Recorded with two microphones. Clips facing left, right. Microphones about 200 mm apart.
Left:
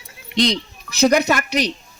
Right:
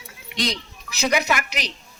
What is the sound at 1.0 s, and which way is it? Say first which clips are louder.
Speech: left 7 dB; 40° left (ahead or behind).